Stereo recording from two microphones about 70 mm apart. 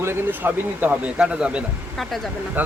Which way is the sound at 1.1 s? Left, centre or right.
Centre.